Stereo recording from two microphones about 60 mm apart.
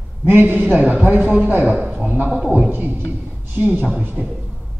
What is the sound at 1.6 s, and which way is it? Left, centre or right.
Speech, centre.